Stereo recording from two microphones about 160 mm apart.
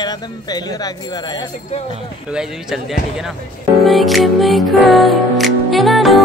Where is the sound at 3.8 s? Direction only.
Centre (ahead or behind).